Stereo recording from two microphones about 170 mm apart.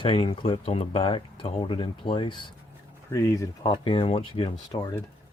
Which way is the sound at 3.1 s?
15° left (ahead or behind).